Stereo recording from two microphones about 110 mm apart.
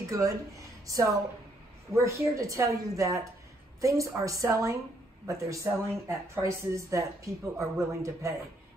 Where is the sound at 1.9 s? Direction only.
30° right (ahead or behind).